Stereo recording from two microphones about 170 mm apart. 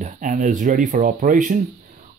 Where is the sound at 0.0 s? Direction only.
50° right (ahead or behind).